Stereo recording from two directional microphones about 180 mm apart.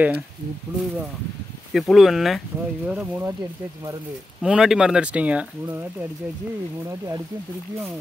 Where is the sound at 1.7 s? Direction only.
Centre (ahead or behind).